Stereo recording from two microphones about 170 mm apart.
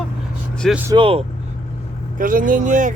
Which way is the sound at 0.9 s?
30° right (ahead or behind).